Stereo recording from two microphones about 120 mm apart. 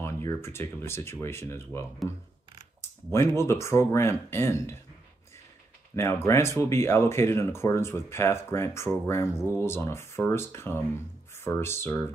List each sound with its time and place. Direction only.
0.0 s speech: 20° left (ahead or behind)
3.1 s speech: 20° left (ahead or behind)
5.9 s speech: 25° left (ahead or behind)